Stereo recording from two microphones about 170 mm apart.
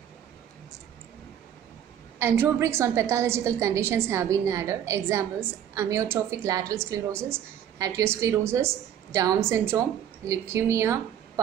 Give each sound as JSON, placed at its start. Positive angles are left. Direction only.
{"t": 2.1, "sound": "a woman's voice", "side_deg": -15}